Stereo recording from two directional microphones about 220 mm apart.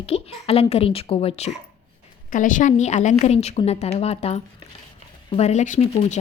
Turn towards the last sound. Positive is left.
turn(degrees=30)  # may be behind; listen again after turning